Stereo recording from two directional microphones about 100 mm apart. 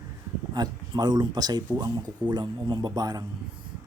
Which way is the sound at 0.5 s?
45° right (ahead or behind).